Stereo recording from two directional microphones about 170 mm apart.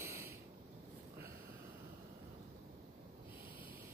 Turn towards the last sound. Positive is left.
turn(degrees=-55)  # may be behind; listen again after turning